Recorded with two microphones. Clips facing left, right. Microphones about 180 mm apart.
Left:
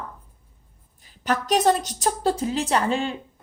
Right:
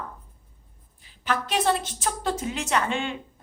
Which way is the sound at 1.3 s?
40° left (ahead or behind).